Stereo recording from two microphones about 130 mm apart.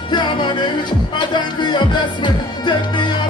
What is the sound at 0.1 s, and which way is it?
Music, 35° left (ahead or behind).